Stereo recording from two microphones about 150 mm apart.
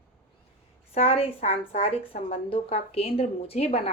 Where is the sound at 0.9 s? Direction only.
40° left (ahead or behind).